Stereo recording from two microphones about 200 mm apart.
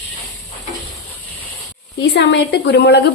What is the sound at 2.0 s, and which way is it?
A woman's voice, 60° left (ahead or behind).